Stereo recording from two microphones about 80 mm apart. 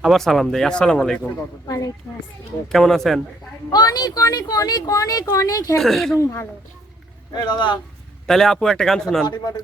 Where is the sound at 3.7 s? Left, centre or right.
Left.